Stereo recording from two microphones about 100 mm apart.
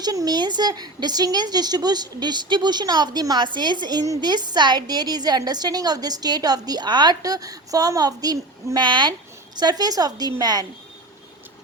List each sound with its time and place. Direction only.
0.0 s a woman's voice: 40° right (ahead or behind)